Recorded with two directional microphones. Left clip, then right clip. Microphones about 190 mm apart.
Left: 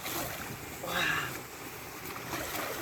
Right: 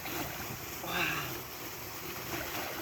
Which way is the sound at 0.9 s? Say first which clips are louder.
Left 3 dB; 5° left (ahead or behind).